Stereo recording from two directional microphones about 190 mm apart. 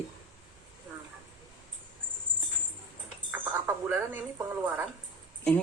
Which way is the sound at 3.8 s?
10° right (ahead or behind).